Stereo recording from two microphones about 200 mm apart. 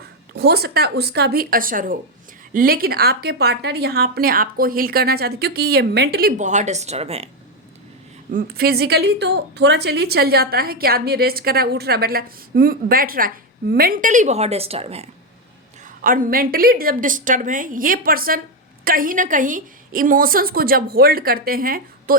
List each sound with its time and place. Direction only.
0.3 s a woman's voice: 55° right (ahead or behind); by 7.3 s 30° right (ahead or behind)
8.3 s a woman's voice: 45° right (ahead or behind); by 15.1 s 30° right (ahead or behind)
16.0 s a woman's voice: 45° right (ahead or behind)